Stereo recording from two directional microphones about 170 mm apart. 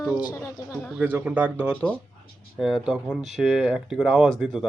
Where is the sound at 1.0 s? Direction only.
10° right (ahead or behind).